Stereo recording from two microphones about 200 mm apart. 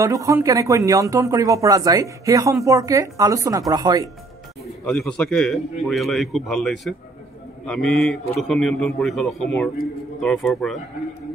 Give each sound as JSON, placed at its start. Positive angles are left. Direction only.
{"t": 0.0, "sound": "speech", "side_deg": -15}
{"t": 4.8, "sound": "a man's voice", "side_deg": 5}